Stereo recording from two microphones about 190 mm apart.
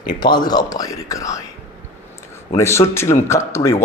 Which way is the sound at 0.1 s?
20° left (ahead or behind).